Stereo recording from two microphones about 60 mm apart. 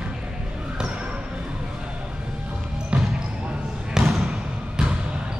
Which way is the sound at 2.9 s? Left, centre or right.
Right.